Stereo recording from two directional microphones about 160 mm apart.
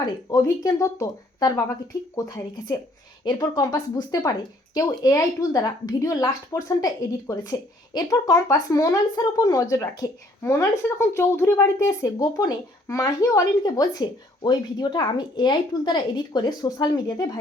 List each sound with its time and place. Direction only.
0.3 s speech: 20° left (ahead or behind)